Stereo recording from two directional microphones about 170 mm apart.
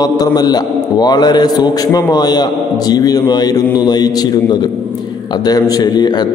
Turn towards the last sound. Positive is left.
turn(degrees=25)  # may be behind; listen again after turning